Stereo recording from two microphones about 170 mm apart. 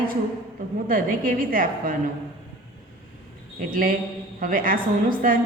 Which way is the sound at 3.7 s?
55° right (ahead or behind).